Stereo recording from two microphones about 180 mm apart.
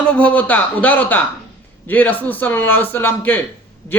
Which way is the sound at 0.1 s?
5° left (ahead or behind).